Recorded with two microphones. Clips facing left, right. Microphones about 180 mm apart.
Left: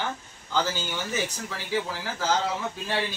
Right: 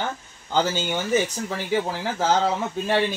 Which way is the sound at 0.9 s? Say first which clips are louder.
Right 8 dB; 50° right (ahead or behind).